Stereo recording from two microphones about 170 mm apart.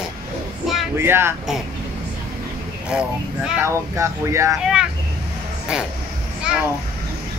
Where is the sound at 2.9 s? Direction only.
5° right (ahead or behind).